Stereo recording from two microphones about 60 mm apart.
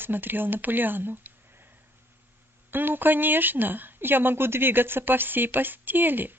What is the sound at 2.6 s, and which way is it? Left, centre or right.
A woman's voice, right.